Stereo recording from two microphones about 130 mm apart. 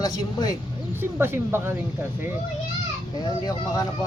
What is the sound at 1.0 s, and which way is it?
Speech, 15° right (ahead or behind).